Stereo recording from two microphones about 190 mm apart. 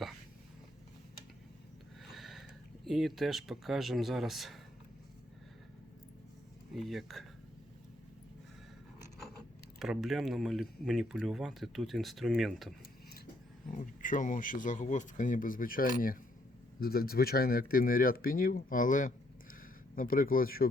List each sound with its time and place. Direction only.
2.0 s a sound: centre (ahead or behind)
2.8 s speech: centre (ahead or behind)
6.7 s speech: centre (ahead or behind)
9.7 s speech: centre (ahead or behind)
13.7 s speech: 45° left (ahead or behind)